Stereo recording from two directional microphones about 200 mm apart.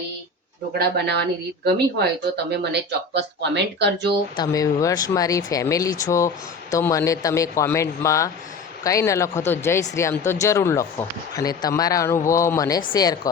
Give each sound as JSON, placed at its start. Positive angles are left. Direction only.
{"t": 0.7, "sound": "speech", "side_deg": -55}
{"t": 4.4, "sound": "speech", "side_deg": 15}